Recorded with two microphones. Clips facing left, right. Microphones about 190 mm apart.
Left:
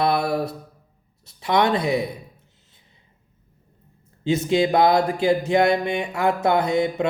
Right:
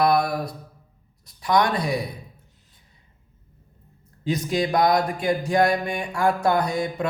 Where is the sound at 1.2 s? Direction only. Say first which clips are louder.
Left 1 dB; 25° left (ahead or behind).